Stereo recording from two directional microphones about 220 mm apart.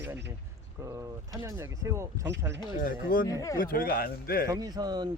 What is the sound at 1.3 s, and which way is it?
Speech, 15° right (ahead or behind).